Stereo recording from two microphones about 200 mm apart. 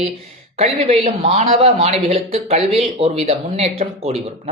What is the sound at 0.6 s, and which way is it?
Speech, 30° right (ahead or behind).